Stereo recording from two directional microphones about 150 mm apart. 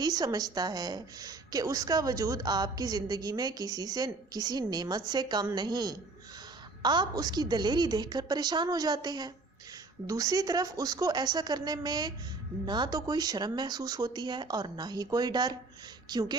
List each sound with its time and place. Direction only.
0.0 s a woman's voice: 25° right (ahead or behind)